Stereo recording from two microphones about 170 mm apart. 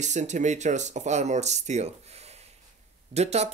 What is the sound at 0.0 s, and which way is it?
Speech, 45° right (ahead or behind).